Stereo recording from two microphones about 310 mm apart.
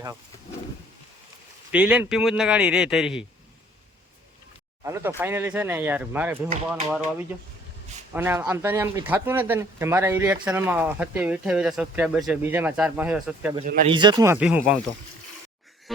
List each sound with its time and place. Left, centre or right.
1.7 s speech: centre
4.8 s speech: centre
13.7 s speech: right
13.9 s speech: centre